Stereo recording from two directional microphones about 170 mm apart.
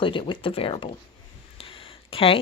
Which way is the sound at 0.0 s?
30° left (ahead or behind).